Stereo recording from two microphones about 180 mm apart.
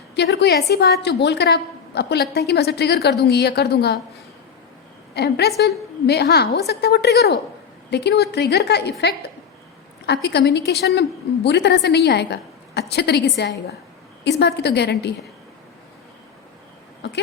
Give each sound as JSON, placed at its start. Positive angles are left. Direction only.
{"t": 0.2, "sound": "a woman's voice", "side_deg": 70}
{"t": 5.1, "sound": "a woman's voice", "side_deg": 65}
{"t": 17.0, "sound": "a woman's voice", "side_deg": 70}